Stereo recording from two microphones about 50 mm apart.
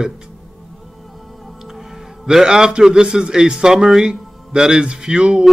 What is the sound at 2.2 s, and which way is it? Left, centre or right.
A man's voice, centre.